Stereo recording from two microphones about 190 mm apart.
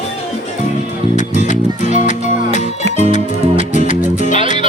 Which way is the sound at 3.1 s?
40° left (ahead or behind).